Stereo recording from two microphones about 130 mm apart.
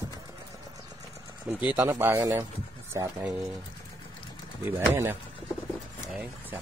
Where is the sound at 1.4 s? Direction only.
10° right (ahead or behind).